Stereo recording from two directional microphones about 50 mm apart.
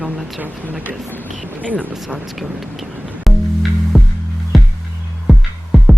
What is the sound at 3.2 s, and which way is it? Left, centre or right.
Music, centre.